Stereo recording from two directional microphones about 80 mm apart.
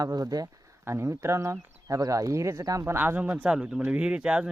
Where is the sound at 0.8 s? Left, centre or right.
Right.